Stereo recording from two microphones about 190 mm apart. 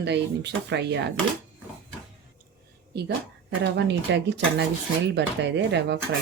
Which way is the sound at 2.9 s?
60° right (ahead or behind).